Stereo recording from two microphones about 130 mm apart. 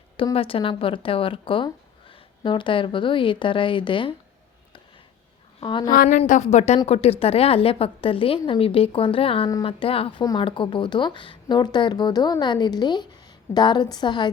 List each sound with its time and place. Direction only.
0.3 s speech: 45° left (ahead or behind)
5.5 s a woman's voice: 35° left (ahead or behind)
5.9 s a woman's voice: 75° left (ahead or behind)
6.8 s a woman's voice: 50° left (ahead or behind)